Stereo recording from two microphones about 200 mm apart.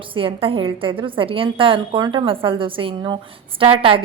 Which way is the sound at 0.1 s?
25° right (ahead or behind).